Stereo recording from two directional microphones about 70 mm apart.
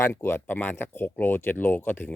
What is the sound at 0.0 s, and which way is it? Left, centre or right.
Speech, left.